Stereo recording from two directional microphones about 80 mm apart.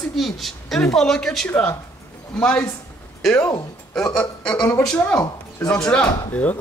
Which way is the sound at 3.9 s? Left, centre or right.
Centre.